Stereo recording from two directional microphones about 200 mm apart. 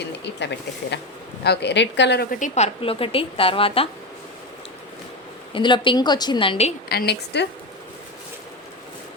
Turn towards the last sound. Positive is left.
turn(degrees=55)  # may be behind; listen again after turning